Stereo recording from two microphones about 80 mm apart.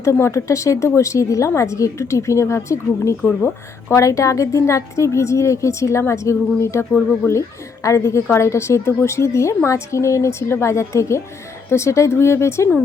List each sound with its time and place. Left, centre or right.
0.0 s a woman's voice: left
4.0 s a woman's voice: left